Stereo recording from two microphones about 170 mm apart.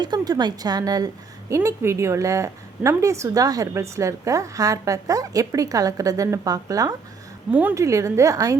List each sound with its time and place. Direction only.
0.0 s a woman's voice: 25° right (ahead or behind)